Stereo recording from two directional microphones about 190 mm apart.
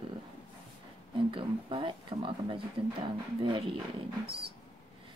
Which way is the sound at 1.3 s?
25° right (ahead or behind).